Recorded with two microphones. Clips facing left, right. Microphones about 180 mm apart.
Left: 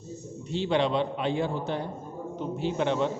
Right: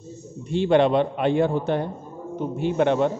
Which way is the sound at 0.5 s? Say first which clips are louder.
Right 7 dB; 55° right (ahead or behind).